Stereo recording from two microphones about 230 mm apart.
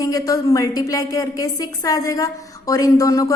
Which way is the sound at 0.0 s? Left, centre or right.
Centre.